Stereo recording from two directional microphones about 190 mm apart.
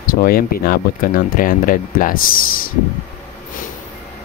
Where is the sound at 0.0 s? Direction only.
50° left (ahead or behind).